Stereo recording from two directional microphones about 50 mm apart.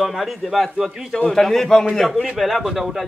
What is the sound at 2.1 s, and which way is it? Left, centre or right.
Speech, centre.